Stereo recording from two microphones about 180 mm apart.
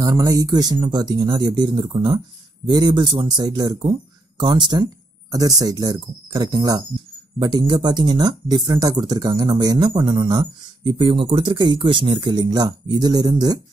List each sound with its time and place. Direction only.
0.0 s speech: 20° right (ahead or behind)